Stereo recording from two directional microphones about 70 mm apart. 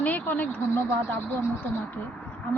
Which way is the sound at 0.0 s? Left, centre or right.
Left.